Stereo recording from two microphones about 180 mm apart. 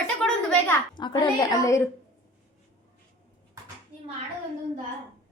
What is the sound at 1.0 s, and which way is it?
Speech, 25° left (ahead or behind).